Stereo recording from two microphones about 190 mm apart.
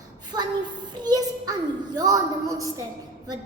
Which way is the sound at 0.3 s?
20° right (ahead or behind).